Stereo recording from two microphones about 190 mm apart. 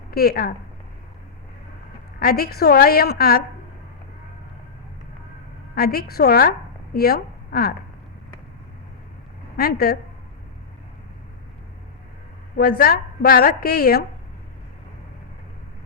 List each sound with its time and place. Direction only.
0.1 s speech: 55° left (ahead or behind)
2.1 s a woman's voice: 50° left (ahead or behind)
5.7 s a woman's voice: 55° left (ahead or behind)
9.6 s a woman's voice: 50° left (ahead or behind)
12.5 s a woman's voice: 55° left (ahead or behind)